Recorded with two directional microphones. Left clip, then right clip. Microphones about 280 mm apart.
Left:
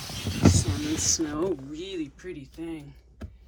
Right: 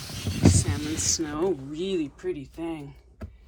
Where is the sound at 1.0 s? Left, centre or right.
Centre.